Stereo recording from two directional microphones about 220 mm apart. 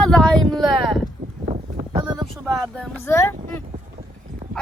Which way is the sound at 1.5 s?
25° right (ahead or behind).